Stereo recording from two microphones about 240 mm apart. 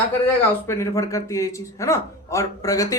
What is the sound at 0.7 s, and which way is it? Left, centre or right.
A man's voice, centre.